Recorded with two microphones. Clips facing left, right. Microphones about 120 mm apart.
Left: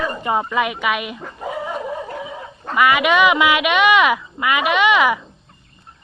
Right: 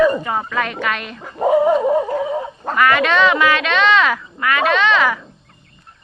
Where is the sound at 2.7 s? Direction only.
10° left (ahead or behind).